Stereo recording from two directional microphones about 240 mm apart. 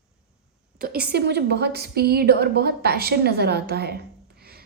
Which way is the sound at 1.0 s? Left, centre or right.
Right.